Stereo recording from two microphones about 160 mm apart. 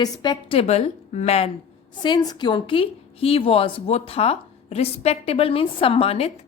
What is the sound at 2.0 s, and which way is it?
A woman's voice, 25° left (ahead or behind).